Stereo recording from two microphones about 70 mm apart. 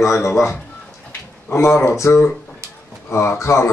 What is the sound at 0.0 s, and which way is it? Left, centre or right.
Speech, left.